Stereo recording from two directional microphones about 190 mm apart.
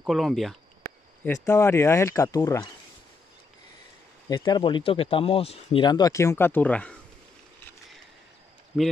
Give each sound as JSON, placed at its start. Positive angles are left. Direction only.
{"t": 0.0, "sound": "speech", "side_deg": 0}
{"t": 1.2, "sound": "speech", "side_deg": 15}
{"t": 4.3, "sound": "speech", "side_deg": 25}